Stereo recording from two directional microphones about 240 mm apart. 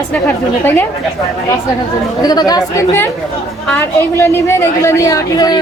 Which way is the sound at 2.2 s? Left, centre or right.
Centre.